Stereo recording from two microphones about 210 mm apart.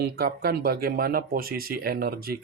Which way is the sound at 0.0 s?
45° right (ahead or behind).